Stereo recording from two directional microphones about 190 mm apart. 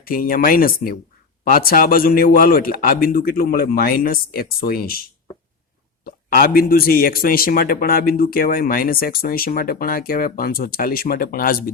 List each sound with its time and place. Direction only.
0.0 s speech: 50° left (ahead or behind)
6.1 s speech: 50° left (ahead or behind)